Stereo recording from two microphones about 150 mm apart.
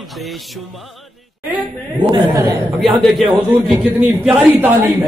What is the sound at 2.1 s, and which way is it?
Speech, 25° right (ahead or behind).